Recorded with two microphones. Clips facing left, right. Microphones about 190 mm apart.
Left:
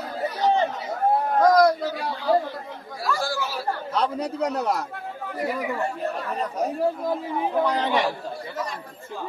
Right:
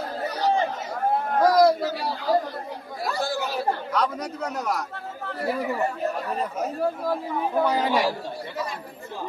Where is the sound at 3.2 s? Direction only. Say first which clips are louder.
Right 2 dB; 20° right (ahead or behind).